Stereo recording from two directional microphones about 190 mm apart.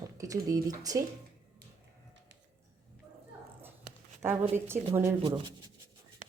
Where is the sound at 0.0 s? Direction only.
15° right (ahead or behind).